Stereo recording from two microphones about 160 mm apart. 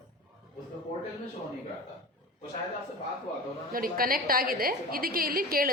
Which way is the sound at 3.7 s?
65° right (ahead or behind).